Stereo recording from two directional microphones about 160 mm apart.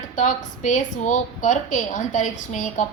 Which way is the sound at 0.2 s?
50° left (ahead or behind).